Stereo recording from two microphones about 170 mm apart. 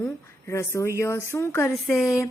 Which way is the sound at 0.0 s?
15° left (ahead or behind).